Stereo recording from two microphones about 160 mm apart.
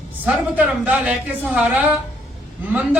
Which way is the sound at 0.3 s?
10° right (ahead or behind).